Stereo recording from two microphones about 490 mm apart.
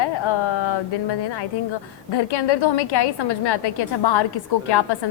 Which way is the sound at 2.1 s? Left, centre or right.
Left.